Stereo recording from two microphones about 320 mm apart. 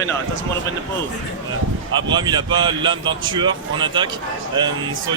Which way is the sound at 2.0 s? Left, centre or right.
Centre.